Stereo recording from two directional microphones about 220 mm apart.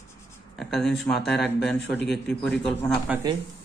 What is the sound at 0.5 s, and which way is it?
Speech, centre (ahead or behind).